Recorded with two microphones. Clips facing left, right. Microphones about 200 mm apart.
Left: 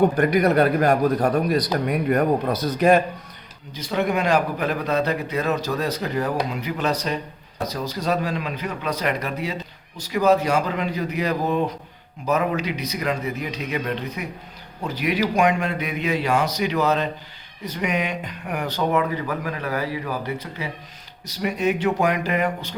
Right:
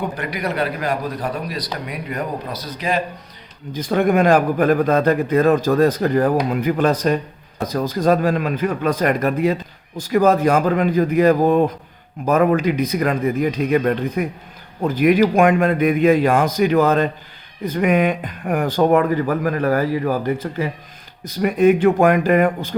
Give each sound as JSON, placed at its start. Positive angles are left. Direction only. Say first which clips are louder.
{"t": 0.0, "sound": "a man's voice", "louder": "left 7 dB", "side_deg": 50}
{"t": 3.8, "sound": "a man's voice", "louder": "right 6 dB", "side_deg": -50}